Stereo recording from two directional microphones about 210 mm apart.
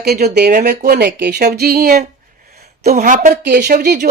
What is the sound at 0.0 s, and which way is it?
Speech, 50° right (ahead or behind).